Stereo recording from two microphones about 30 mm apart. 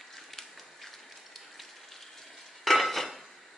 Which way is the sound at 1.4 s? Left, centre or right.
Centre.